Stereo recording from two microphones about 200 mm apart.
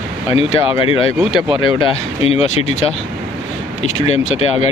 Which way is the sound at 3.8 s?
35° left (ahead or behind).